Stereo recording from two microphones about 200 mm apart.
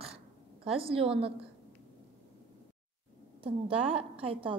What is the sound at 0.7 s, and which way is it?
Speech, 30° right (ahead or behind).